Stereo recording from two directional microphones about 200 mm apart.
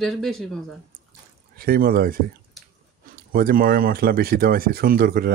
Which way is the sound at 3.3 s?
45° right (ahead or behind).